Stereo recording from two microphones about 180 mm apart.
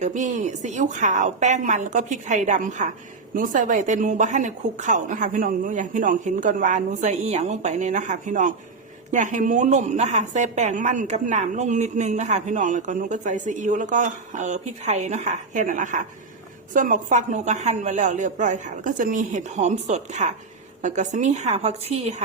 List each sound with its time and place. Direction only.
0.0 s a woman's voice: 40° right (ahead or behind)